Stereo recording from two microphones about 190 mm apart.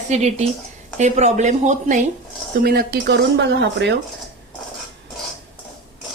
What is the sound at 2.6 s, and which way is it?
Speech, 55° right (ahead or behind).